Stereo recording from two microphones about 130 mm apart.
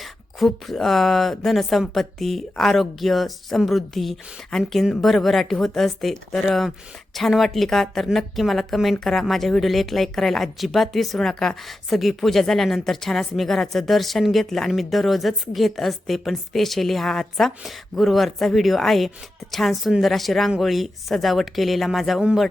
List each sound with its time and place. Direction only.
0.0 s speech: centre (ahead or behind)